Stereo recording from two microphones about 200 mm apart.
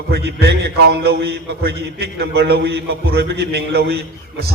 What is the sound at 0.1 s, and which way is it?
A man's voice, 55° right (ahead or behind).